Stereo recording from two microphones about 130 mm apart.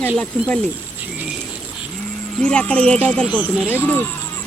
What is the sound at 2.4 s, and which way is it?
Speech, 10° left (ahead or behind).